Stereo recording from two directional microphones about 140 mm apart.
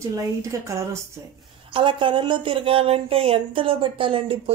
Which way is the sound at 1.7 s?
35° right (ahead or behind).